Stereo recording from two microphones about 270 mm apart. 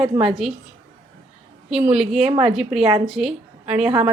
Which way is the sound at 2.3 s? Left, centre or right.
Right.